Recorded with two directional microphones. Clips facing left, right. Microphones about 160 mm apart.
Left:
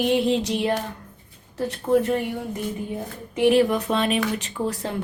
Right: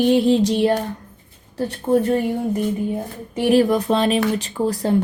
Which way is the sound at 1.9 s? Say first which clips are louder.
Right 2 dB; 30° right (ahead or behind).